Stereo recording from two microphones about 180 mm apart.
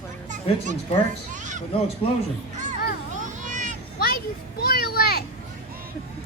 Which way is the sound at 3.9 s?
55° left (ahead or behind).